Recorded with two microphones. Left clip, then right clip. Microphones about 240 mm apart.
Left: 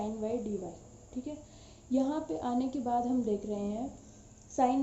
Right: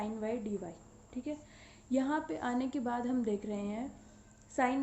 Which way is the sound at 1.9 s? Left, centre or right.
Right.